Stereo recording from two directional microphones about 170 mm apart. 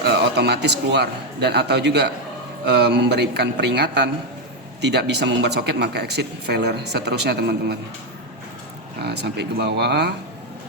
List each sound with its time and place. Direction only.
0.0 s speech: 75° right (ahead or behind)
9.0 s speech: 75° right (ahead or behind)